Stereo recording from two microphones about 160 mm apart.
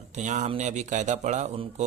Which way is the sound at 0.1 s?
50° right (ahead or behind).